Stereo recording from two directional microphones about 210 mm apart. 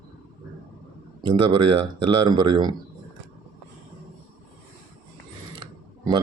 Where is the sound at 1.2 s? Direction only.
25° right (ahead or behind).